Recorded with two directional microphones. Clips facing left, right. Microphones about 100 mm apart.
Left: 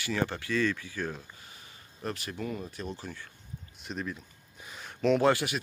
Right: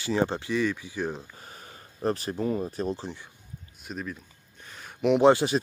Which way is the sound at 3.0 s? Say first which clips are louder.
Right 4 dB; 25° right (ahead or behind).